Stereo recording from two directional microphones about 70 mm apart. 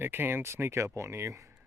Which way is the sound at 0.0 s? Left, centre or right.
Right.